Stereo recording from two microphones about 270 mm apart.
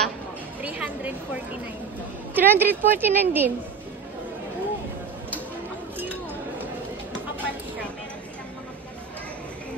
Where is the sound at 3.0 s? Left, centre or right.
Centre.